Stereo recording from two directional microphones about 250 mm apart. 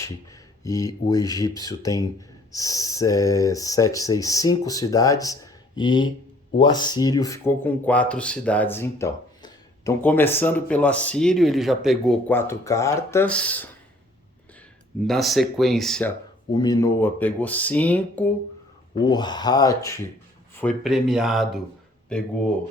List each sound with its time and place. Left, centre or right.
0.0 s speech: centre
15.0 s speech: centre
16.5 s speech: centre
19.0 s speech: centre